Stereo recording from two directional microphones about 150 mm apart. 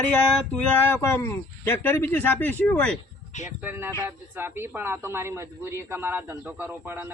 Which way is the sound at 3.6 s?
15° right (ahead or behind).